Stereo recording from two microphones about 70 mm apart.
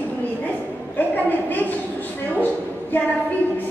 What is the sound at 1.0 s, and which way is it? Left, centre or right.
A woman's voice, left.